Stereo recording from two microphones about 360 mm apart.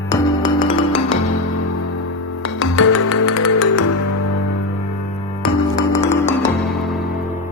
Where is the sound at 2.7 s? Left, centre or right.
Left.